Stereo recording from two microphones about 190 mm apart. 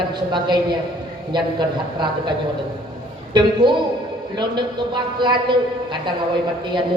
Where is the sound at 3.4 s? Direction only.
25° right (ahead or behind).